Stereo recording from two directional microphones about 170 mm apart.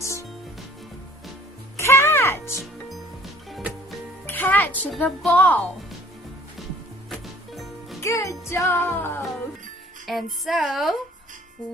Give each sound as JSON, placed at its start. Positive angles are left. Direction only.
{"t": 0.0, "sound": "music", "side_deg": 15}
{"t": 1.7, "sound": "music", "side_deg": 15}
{"t": 4.3, "sound": "speech", "side_deg": 10}
{"t": 7.1, "sound": "music", "side_deg": 0}
{"t": 8.0, "sound": "music", "side_deg": 20}
{"t": 10.1, "sound": "speech", "side_deg": 0}